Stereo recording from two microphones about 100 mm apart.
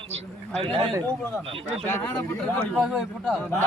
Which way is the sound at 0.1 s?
90° right.